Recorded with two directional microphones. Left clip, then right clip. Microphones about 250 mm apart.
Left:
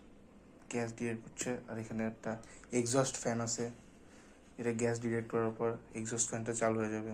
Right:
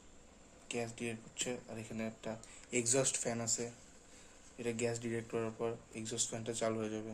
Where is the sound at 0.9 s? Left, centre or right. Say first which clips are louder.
Left 2 dB; right.